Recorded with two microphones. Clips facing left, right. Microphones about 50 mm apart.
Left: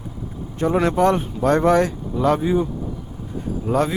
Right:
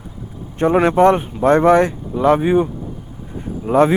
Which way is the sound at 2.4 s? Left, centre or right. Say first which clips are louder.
Right 5 dB; right.